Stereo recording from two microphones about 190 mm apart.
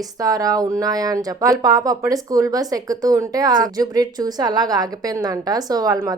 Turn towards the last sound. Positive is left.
turn(degrees=-20)  # may be behind; listen again after turning